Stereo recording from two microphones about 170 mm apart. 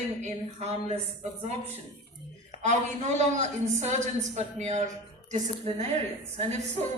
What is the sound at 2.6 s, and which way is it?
A woman's voice, 45° right (ahead or behind).